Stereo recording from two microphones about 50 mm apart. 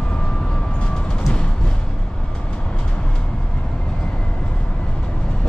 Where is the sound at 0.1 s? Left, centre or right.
Centre.